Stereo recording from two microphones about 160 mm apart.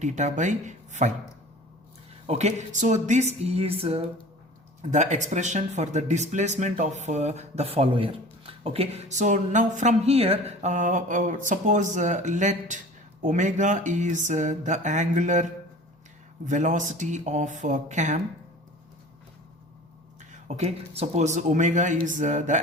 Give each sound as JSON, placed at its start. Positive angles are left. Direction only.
{"t": 0.0, "sound": "speech", "side_deg": -50}
{"t": 2.2, "sound": "speech", "side_deg": -40}
{"t": 4.8, "sound": "speech", "side_deg": -50}
{"t": 16.5, "sound": "speech", "side_deg": -50}
{"t": 20.6, "sound": "speech", "side_deg": -40}